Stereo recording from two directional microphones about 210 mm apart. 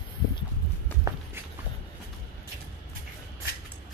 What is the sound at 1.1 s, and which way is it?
Walk, 15° right (ahead or behind).